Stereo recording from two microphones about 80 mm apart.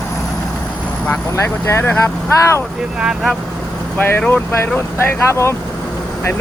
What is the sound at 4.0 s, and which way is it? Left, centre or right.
Speech, left.